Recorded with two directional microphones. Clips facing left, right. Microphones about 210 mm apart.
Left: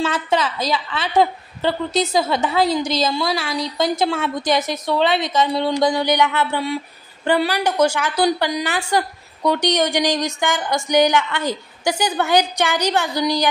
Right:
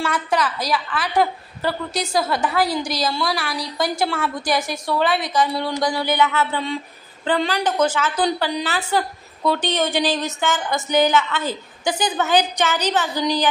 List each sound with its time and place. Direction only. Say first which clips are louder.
0.0 s a woman's voice: left 2 dB; 25° left (ahead or behind)